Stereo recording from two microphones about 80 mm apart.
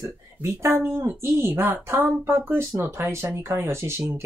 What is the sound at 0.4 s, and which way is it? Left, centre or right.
Speech, right.